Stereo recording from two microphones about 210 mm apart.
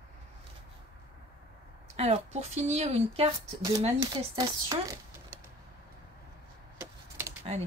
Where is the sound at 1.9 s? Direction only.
30° right (ahead or behind).